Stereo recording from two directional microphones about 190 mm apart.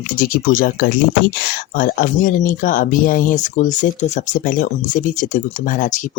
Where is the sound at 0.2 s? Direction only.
45° left (ahead or behind).